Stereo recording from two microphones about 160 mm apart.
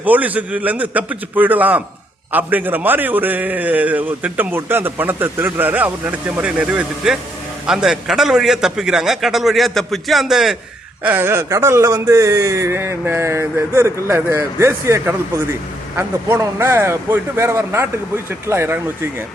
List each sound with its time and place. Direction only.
0.0 s a man's voice: 10° right (ahead or behind)